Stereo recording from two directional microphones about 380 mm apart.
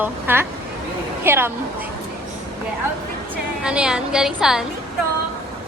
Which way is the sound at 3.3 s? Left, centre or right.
Centre.